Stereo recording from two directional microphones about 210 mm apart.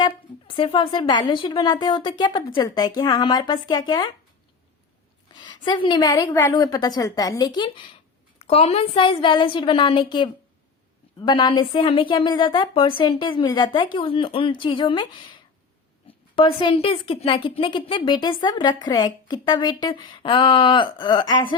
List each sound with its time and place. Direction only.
0.0 s a woman's voice: 25° left (ahead or behind)
5.3 s a woman's voice: 20° left (ahead or behind)
16.3 s a woman's voice: 25° left (ahead or behind)